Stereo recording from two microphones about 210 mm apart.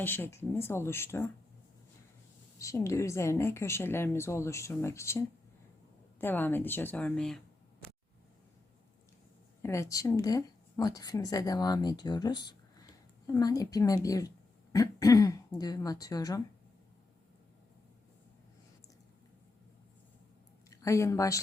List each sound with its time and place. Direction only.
0.0 s a woman's voice: 10° left (ahead or behind)
2.6 s a woman's voice: 15° left (ahead or behind)
9.6 s speech: 10° left (ahead or behind)
20.7 s a woman's voice: 15° left (ahead or behind)